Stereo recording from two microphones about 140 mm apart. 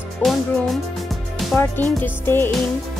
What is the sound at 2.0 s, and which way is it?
Speech, 15° left (ahead or behind).